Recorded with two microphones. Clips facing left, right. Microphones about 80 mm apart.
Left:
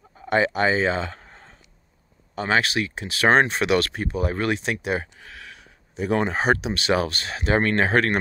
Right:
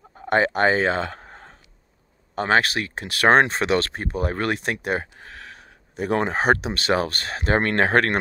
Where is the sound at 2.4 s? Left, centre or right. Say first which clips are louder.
Right 2 dB; right.